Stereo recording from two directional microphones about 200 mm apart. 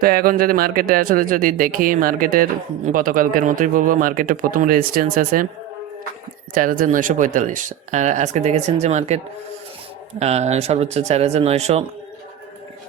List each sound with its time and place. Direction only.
0.0 s speech: 45° right (ahead or behind)
6.5 s speech: 45° right (ahead or behind)